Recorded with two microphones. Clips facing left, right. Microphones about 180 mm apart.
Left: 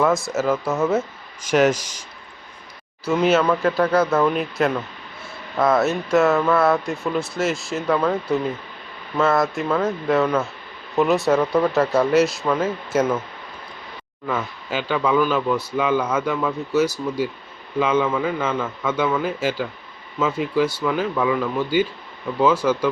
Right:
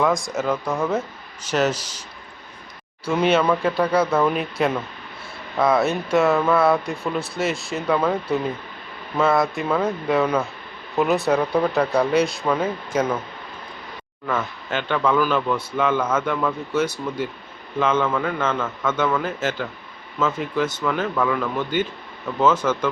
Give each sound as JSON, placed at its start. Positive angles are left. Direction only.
{"t": 0.0, "sound": "a man's voice", "side_deg": 5}
{"t": 3.0, "sound": "speech", "side_deg": 0}
{"t": 14.3, "sound": "a man's voice", "side_deg": 10}
{"t": 16.8, "sound": "speech", "side_deg": -25}
{"t": 17.7, "sound": "a man's voice", "side_deg": 10}